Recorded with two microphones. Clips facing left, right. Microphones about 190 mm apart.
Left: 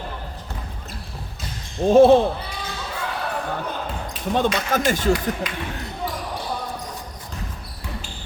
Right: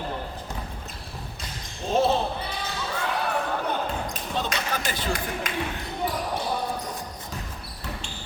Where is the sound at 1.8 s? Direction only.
55° left (ahead or behind).